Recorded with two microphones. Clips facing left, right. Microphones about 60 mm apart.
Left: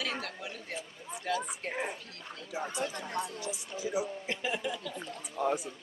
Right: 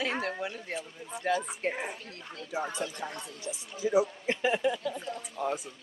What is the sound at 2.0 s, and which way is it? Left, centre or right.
Speech, right.